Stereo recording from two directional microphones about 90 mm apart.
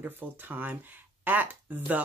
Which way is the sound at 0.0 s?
20° right (ahead or behind).